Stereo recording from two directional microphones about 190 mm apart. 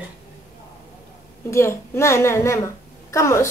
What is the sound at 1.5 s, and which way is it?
A woman's voice, 15° left (ahead or behind).